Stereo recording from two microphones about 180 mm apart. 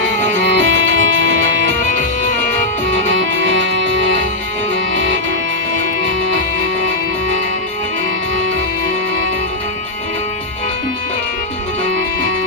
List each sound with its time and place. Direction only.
0.4 s music: 90° right
2.8 s music: 90° right